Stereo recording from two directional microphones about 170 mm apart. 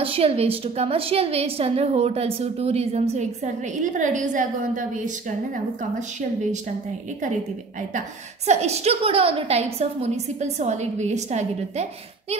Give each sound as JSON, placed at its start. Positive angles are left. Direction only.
{"t": 0.0, "sound": "a woman's voice", "side_deg": -35}
{"t": 8.5, "sound": "a woman's voice", "side_deg": -40}